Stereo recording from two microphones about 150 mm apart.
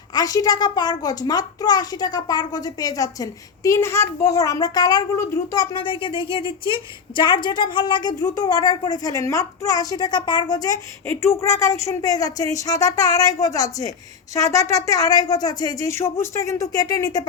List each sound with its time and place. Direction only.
0.1 s a child's voice: 25° left (ahead or behind)